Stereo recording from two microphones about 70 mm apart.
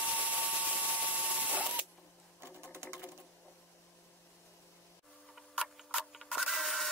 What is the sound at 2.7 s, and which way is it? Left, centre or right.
Sewing machine, right.